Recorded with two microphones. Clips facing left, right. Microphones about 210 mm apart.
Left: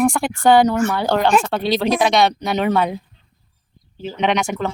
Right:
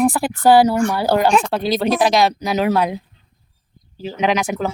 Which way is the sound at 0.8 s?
5° left (ahead or behind).